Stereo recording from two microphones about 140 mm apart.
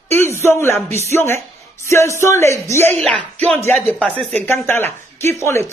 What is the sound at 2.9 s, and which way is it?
Speech, 5° left (ahead or behind).